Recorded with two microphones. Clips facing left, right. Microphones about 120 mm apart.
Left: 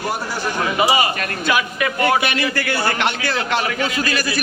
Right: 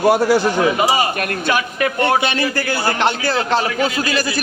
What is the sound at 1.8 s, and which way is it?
A man's voice, 25° right (ahead or behind).